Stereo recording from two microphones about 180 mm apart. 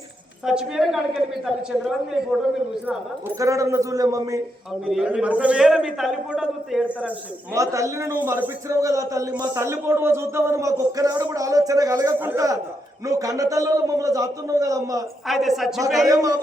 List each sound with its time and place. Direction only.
0.4 s a man's voice: 5° right (ahead or behind); by 4.4 s 20° right (ahead or behind)
4.9 s a man's voice: 5° right (ahead or behind)
7.5 s a man's voice: 15° right (ahead or behind)
15.3 s a man's voice: centre (ahead or behind)
16.0 s a man's voice: 20° right (ahead or behind)